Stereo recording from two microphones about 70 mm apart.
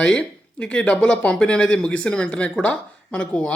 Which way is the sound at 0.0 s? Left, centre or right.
Centre.